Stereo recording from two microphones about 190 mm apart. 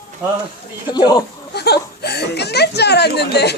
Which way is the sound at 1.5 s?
60° left (ahead or behind).